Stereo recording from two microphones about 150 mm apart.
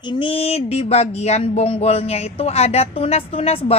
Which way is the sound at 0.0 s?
35° left (ahead or behind).